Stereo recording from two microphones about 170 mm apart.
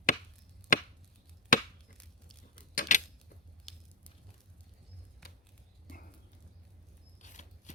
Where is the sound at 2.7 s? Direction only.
55° left (ahead or behind).